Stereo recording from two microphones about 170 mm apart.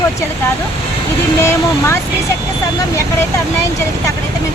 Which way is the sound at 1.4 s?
15° left (ahead or behind).